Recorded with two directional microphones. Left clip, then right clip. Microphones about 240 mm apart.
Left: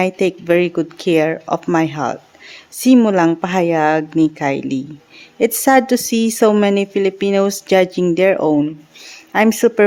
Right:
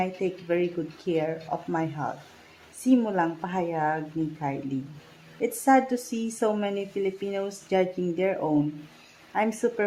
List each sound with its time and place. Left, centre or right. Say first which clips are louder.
0.0 s a woman's voice: left 12 dB; left